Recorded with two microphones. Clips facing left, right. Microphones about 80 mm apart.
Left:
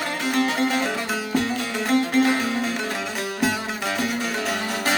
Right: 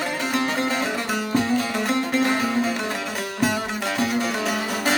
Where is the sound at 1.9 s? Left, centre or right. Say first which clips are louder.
Left 4 dB; centre.